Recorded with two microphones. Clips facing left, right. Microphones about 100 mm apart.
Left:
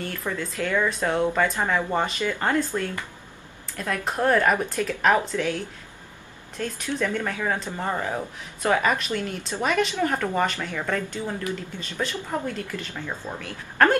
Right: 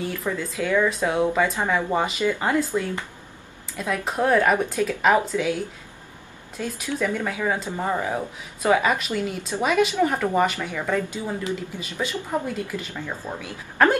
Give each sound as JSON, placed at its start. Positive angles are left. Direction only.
{"t": 0.0, "sound": "speech", "side_deg": -5}